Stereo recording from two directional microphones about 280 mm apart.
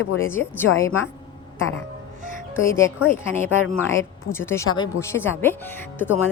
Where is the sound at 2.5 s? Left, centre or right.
Centre.